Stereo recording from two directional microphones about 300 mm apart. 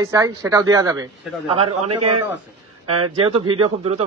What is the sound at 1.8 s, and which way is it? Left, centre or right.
Speech, right.